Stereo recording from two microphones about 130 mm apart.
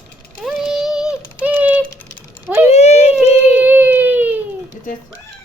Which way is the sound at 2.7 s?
55° left (ahead or behind).